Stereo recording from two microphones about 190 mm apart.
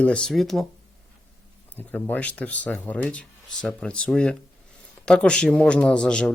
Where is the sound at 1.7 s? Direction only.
10° left (ahead or behind).